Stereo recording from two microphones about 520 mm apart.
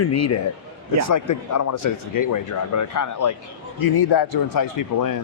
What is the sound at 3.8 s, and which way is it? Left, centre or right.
A man's voice, left.